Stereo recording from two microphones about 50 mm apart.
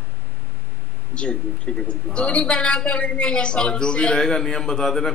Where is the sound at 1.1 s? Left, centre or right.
Centre.